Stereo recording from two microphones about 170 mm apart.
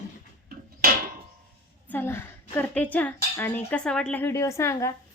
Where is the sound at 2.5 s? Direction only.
10° left (ahead or behind).